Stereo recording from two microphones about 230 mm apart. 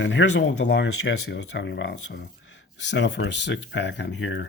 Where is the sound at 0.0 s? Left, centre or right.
Left.